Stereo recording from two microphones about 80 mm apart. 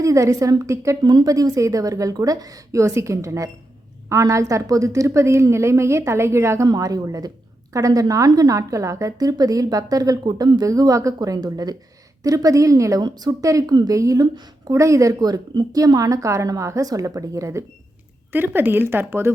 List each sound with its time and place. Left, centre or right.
0.0 s a woman's voice: right
1.0 s a woman's voice: right
6.7 s a woman's voice: right
18.3 s speech: right